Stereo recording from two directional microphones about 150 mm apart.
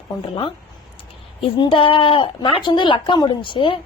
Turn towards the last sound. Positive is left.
turn(degrees=35)  # may be behind; listen again after turning